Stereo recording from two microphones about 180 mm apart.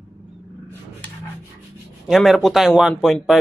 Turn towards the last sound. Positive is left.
turn(degrees=0)  # may be behind; listen again after turning